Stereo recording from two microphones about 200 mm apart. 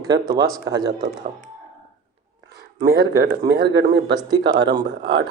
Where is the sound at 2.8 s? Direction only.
50° right (ahead or behind).